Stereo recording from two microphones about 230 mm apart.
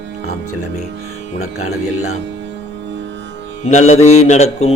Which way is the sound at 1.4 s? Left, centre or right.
Left.